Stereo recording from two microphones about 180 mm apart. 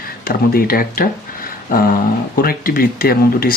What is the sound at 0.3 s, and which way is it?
Speech, 55° left (ahead or behind).